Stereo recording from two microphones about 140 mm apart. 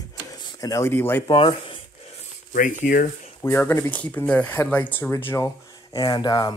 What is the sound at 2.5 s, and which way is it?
Speech, 75° left (ahead or behind).